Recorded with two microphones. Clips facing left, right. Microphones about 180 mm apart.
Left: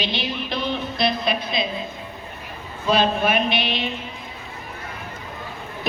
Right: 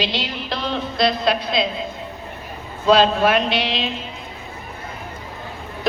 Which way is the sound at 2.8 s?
90° right.